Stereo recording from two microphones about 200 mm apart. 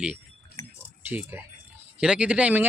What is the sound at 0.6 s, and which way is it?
Keys jangling, 20° left (ahead or behind).